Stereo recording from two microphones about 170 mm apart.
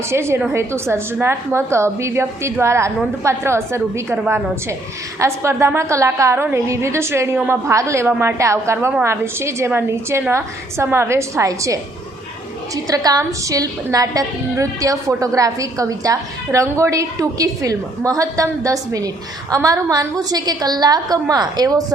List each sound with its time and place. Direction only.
0.1 s a woman's voice: 15° right (ahead or behind)